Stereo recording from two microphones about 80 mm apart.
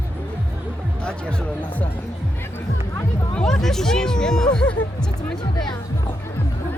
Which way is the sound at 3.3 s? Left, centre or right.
Centre.